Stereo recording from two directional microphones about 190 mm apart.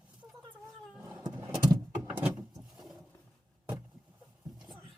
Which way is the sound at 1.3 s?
20° right (ahead or behind).